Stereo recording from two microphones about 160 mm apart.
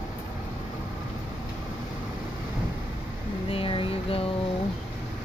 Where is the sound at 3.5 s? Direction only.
35° left (ahead or behind).